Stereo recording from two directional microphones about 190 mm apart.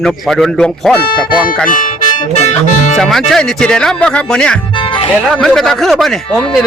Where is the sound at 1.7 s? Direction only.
45° left (ahead or behind).